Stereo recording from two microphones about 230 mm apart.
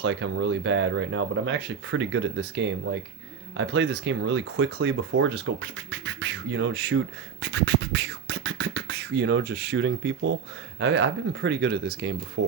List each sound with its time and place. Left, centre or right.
0.0 s speech: right